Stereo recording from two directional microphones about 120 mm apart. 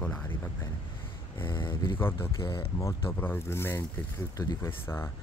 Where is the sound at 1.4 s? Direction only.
45° left (ahead or behind).